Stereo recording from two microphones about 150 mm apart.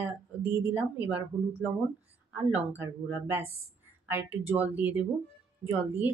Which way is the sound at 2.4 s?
20° right (ahead or behind).